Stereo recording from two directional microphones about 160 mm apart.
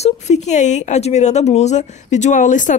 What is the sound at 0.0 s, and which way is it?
A woman's voice, 45° left (ahead or behind).